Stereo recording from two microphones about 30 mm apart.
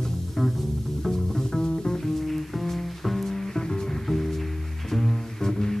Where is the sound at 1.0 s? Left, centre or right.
Centre.